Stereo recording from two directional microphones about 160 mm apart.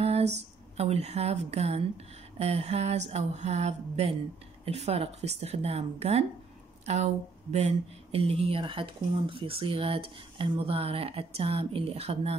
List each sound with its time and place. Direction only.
0.0 s a sound: 40° right (ahead or behind)
0.7 s speech: 40° right (ahead or behind)
7.5 s speech: 40° right (ahead or behind)